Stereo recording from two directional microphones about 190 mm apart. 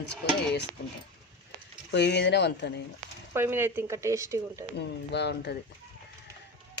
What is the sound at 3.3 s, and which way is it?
Speech, 10° right (ahead or behind).